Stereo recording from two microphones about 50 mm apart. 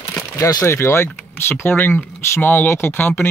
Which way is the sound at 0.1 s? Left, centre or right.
Left.